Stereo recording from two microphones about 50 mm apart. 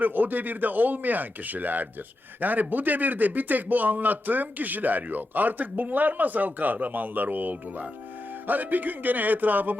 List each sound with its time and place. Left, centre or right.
0.0 s speech: right